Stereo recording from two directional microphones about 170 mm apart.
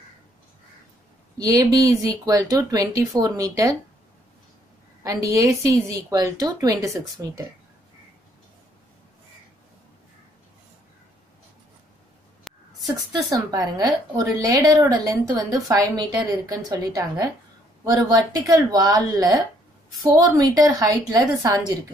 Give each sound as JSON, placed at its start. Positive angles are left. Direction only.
{"t": 1.4, "sound": "a woman's voice", "side_deg": -20}
{"t": 5.0, "sound": "a woman's voice", "side_deg": -20}
{"t": 12.4, "sound": "a sound", "side_deg": 0}
{"t": 13.1, "sound": "a woman's voice", "side_deg": -20}